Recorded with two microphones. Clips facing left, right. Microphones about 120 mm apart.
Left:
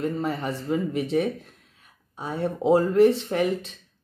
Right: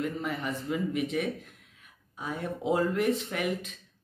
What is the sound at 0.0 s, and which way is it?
Speech, 35° left (ahead or behind).